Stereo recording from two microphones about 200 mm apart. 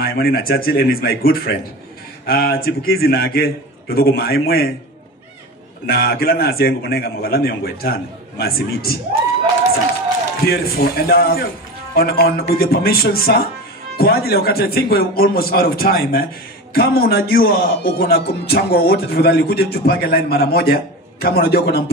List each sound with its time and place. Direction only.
0.0 s a man's voice: 50° left (ahead or behind)
5.9 s a man's voice: 50° left (ahead or behind)
10.4 s a man's voice: 50° left (ahead or behind)